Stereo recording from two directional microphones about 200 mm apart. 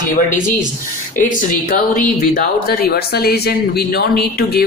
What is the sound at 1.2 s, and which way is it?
Speech, 45° left (ahead or behind).